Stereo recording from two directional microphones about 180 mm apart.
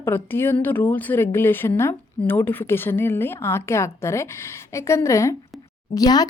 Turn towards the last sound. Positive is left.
turn(degrees=20)  # may be behind; listen again after turning